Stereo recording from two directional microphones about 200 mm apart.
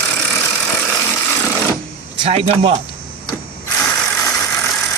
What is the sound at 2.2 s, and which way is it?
Speech, 30° right (ahead or behind).